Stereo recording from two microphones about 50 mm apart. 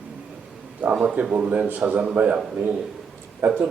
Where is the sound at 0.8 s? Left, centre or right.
Right.